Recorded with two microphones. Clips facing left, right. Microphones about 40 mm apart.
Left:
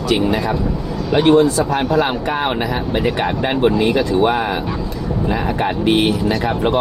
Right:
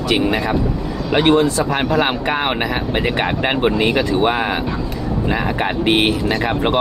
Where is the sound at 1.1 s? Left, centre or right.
Right.